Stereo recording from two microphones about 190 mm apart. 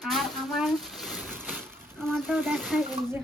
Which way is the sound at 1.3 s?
10° right (ahead or behind).